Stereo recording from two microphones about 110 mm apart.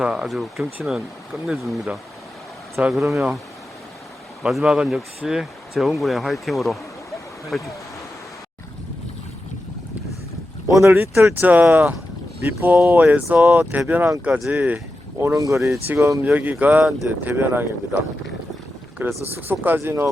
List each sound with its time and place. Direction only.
0.0 s speech: 5° right (ahead or behind)
2.9 s speech: centre (ahead or behind)
4.4 s speech: 5° right (ahead or behind)
10.7 s speech: 30° right (ahead or behind)
14.3 s speech: centre (ahead or behind)
15.2 s speech: 30° right (ahead or behind)
16.2 s speech: 15° right (ahead or behind)